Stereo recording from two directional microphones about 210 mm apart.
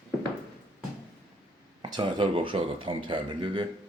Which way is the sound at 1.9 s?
20° right (ahead or behind).